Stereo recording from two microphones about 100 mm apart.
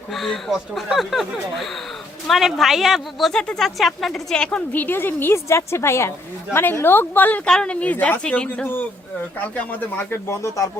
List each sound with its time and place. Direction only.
0.1 s a woman's voice: centre (ahead or behind); by 10.7 s 30° left (ahead or behind)